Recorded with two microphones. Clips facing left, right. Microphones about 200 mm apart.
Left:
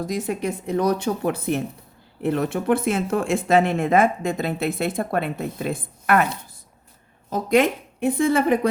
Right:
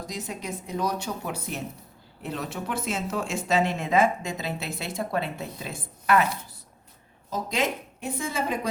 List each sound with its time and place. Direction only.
0.1 s speech: 55° left (ahead or behind)
7.3 s speech: 60° left (ahead or behind)